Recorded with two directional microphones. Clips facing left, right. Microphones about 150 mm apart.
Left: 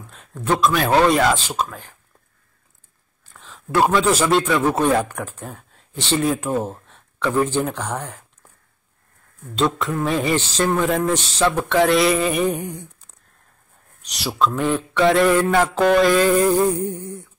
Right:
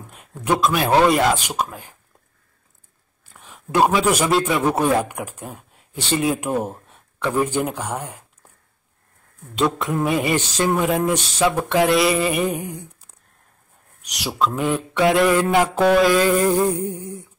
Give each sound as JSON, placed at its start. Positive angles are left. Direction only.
{"t": 0.0, "sound": "a man's voice", "side_deg": -10}
{"t": 3.3, "sound": "speech", "side_deg": -15}
{"t": 9.8, "sound": "a man's voice", "side_deg": -20}
{"t": 11.1, "sound": "a sound", "side_deg": -10}
{"t": 14.0, "sound": "a man's voice", "side_deg": -10}
{"t": 15.5, "sound": "a man's voice", "side_deg": -15}
{"t": 15.8, "sound": "a sound", "side_deg": -5}